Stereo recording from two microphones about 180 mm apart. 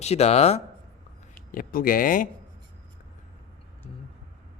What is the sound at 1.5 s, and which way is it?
Speech, 50° left (ahead or behind).